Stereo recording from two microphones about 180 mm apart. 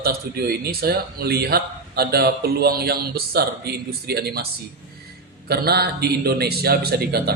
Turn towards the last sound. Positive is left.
turn(degrees=-60)  # may be behind; listen again after turning